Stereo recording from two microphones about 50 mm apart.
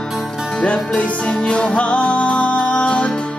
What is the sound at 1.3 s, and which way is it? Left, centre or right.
Music, centre.